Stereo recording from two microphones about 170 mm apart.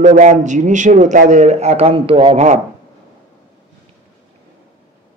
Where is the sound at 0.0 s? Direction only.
45° right (ahead or behind).